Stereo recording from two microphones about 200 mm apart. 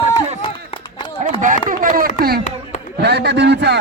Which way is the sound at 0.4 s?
25° left (ahead or behind).